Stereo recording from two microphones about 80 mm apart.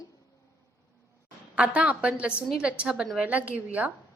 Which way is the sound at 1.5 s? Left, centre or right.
Centre.